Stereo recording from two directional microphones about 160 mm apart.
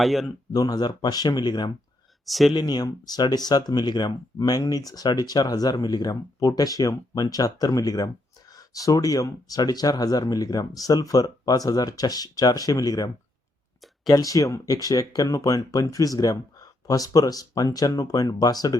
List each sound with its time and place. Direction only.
0.0 s speech: centre (ahead or behind)
0.5 s speech: 25° left (ahead or behind)
2.2 s speech: centre (ahead or behind)
2.5 s speech: 25° left (ahead or behind)
14.1 s speech: 20° left (ahead or behind)